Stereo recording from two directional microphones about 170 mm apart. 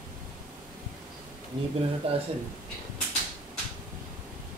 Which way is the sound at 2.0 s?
35° right (ahead or behind).